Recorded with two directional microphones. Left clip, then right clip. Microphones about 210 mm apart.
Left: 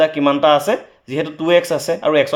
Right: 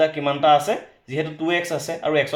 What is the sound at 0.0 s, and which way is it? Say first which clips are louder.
Speech: left 5 dB; 50° left (ahead or behind).